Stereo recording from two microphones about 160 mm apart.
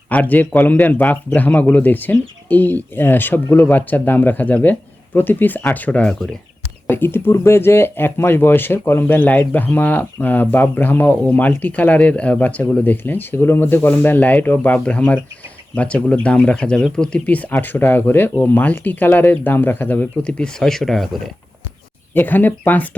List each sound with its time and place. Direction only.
0.1 s speech: 10° left (ahead or behind)
22.1 s speech: 10° left (ahead or behind)